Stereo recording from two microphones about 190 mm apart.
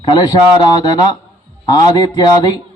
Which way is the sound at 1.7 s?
20° left (ahead or behind).